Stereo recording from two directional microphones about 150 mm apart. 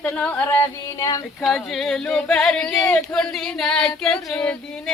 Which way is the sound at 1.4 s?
Centre (ahead or behind).